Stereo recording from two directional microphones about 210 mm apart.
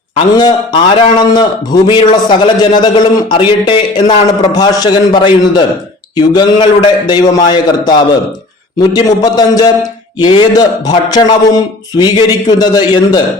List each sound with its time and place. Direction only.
0.3 s a man's voice: 20° left (ahead or behind)